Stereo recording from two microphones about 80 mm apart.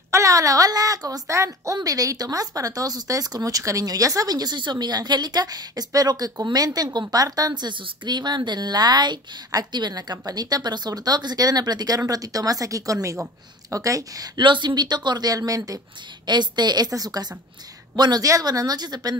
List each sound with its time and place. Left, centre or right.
0.1 s a woman's voice: right
14.4 s speech: right
16.3 s a woman's voice: right